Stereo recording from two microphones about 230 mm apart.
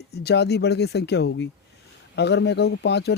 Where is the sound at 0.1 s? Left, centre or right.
Left.